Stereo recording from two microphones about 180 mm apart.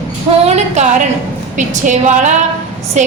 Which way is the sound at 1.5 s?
45° right (ahead or behind).